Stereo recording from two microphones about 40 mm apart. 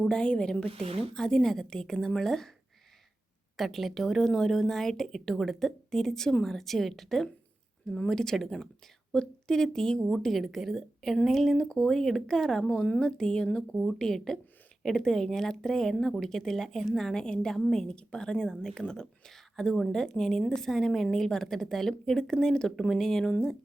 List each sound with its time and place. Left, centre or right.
0.0 s a woman's voice: left
3.6 s a woman's voice: centre
7.9 s a woman's voice: left
10.1 s a woman's voice: centre